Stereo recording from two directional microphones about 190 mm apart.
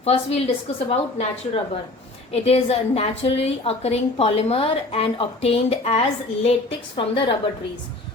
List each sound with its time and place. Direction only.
0.0 s a woman's voice: 30° left (ahead or behind)